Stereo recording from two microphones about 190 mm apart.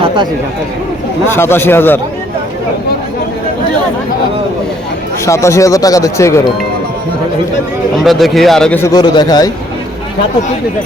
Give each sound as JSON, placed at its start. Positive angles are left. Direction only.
{"t": 1.3, "sound": "speech", "side_deg": 10}
{"t": 5.2, "sound": "speech", "side_deg": 15}
{"t": 8.0, "sound": "speech", "side_deg": 0}
{"t": 8.8, "sound": "a man's voice", "side_deg": 20}